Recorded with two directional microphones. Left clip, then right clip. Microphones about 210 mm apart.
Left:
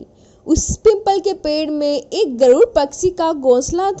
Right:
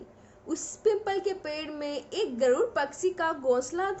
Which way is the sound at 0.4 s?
40° left (ahead or behind).